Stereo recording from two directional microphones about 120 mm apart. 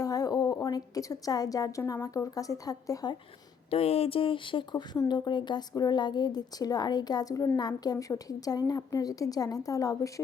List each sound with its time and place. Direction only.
0.0 s a sound: 30° left (ahead or behind)
1.9 s a woman's voice: 30° left (ahead or behind)
3.7 s a woman's voice: 55° left (ahead or behind); by 10.1 s 30° left (ahead or behind)